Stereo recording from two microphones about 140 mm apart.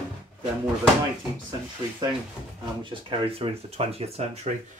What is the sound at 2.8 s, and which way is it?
Speech, 35° right (ahead or behind).